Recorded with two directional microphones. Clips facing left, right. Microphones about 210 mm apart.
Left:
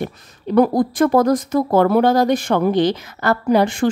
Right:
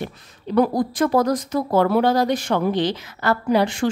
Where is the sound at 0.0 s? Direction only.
50° left (ahead or behind).